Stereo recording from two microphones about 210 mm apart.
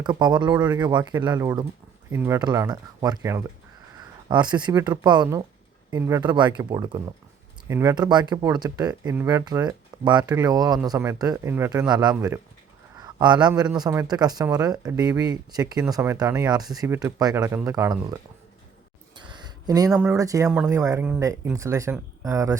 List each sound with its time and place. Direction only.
0.0 s speech: 20° right (ahead or behind)